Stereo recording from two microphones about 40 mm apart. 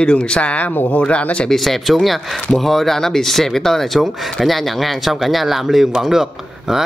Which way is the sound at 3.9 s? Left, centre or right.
Centre.